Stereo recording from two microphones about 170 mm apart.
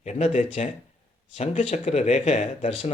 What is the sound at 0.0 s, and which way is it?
Speech, 40° left (ahead or behind).